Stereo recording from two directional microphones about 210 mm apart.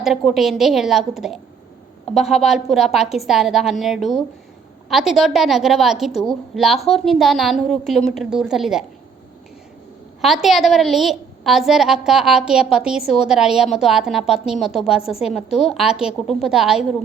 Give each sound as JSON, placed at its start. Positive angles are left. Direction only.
{"t": 0.0, "sound": "a woman's voice", "side_deg": 0}
{"t": 10.2, "sound": "a woman's voice", "side_deg": 0}